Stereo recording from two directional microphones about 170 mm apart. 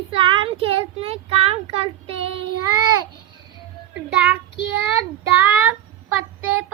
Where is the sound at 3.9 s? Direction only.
5° right (ahead or behind).